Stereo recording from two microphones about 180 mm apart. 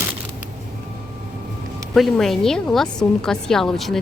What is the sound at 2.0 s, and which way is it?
A woman's voice, centre (ahead or behind).